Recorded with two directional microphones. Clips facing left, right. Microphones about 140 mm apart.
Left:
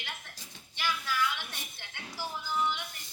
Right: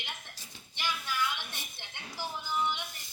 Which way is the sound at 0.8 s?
20° right (ahead or behind).